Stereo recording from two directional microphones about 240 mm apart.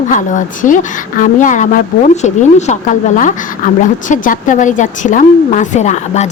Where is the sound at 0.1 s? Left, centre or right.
Left.